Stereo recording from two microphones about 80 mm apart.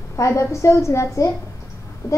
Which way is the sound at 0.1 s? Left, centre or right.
Left.